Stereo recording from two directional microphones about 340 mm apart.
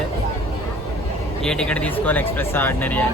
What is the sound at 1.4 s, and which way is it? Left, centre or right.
Speech, centre.